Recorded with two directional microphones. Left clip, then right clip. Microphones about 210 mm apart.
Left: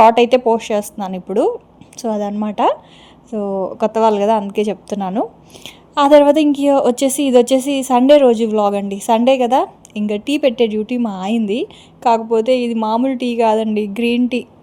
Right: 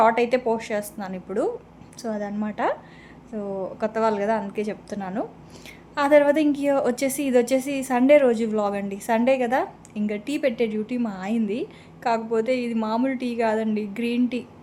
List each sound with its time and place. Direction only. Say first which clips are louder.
0.0 s a woman's voice: left 9 dB; 30° left (ahead or behind)